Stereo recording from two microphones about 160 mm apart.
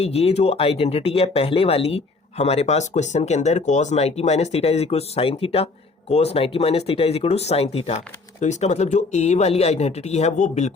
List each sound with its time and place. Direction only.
0.0 s speech: 40° left (ahead or behind)